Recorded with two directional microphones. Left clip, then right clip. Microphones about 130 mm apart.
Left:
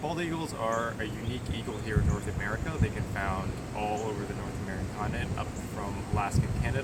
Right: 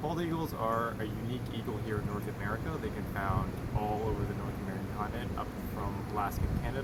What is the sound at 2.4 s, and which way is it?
Speech, 20° left (ahead or behind).